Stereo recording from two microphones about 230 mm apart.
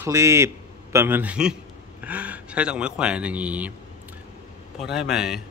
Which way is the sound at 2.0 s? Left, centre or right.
Centre.